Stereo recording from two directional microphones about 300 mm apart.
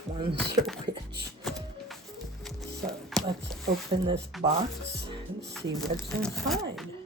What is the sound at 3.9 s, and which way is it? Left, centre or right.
Speech, centre.